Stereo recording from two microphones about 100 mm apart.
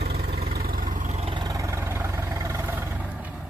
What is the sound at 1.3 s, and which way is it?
Vehicle, 40° right (ahead or behind).